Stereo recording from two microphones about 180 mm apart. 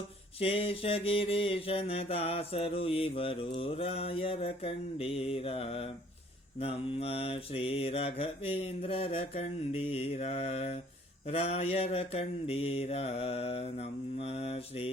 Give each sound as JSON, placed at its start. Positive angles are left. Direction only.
{"t": 0.3, "sound": "mantra", "side_deg": 30}